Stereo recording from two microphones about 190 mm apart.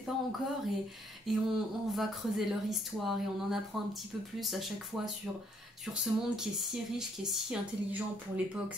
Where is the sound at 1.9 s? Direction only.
Centre (ahead or behind).